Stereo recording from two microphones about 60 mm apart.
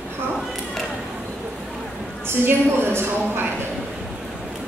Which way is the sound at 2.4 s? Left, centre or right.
Right.